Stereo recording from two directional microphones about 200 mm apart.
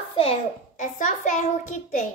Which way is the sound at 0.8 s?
40° left (ahead or behind).